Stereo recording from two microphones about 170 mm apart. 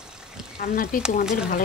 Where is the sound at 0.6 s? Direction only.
60° left (ahead or behind).